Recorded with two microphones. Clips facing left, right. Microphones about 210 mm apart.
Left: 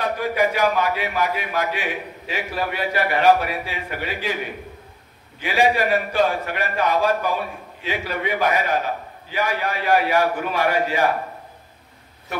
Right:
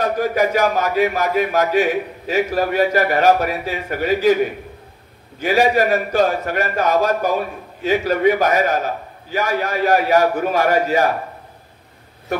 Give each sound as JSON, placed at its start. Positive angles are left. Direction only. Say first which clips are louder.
{"t": 0.0, "sound": "a man's voice", "louder": "right 4 dB", "side_deg": -45}
{"t": 5.4, "sound": "a man's voice", "louder": "right 4 dB", "side_deg": -45}